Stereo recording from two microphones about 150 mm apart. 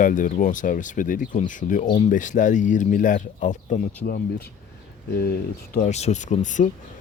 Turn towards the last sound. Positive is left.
turn(degrees=55)  # may be behind; listen again after turning